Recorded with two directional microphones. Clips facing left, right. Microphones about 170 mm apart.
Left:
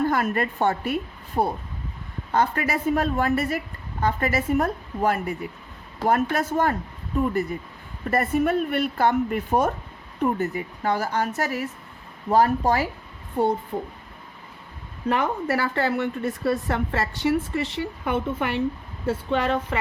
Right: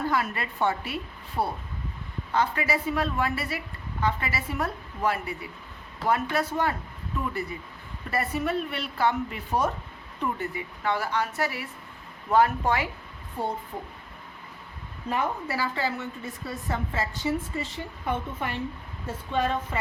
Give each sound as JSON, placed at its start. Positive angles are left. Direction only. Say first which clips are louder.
{"t": 0.1, "sound": "speech", "louder": "left 5 dB", "side_deg": 50}
{"t": 1.4, "sound": "speech", "louder": "left 5 dB", "side_deg": 30}
{"t": 2.3, "sound": "speech", "louder": "left 3 dB", "side_deg": 50}
{"t": 8.1, "sound": "speech", "louder": "left 6 dB", "side_deg": 50}
{"t": 15.1, "sound": "a woman's voice", "louder": "left 5 dB", "side_deg": 65}